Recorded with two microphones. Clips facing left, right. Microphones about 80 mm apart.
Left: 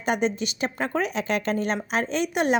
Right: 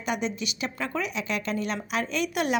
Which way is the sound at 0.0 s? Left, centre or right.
Left.